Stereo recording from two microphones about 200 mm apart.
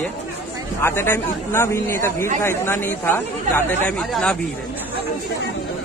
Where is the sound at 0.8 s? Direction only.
10° left (ahead or behind).